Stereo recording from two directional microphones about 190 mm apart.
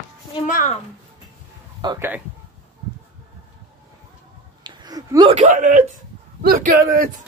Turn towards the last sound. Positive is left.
turn(degrees=-50)  # may be behind; listen again after turning